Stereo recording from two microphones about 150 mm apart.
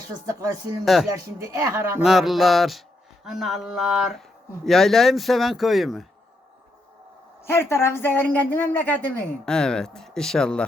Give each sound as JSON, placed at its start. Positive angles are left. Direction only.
{"t": 0.3, "sound": "speech", "side_deg": -25}
{"t": 2.0, "sound": "speech", "side_deg": 0}
{"t": 7.4, "sound": "speech", "side_deg": 15}